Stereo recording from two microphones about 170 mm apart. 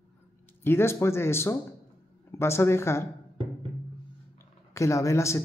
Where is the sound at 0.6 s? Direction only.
15° left (ahead or behind).